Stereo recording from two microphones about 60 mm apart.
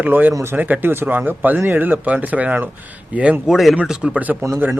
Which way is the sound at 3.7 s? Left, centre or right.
Centre.